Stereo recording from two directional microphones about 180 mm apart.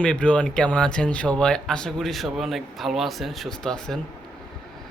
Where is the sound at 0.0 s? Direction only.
5° left (ahead or behind).